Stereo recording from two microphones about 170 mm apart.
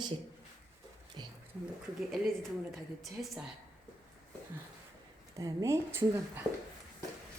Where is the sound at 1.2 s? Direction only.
25° right (ahead or behind).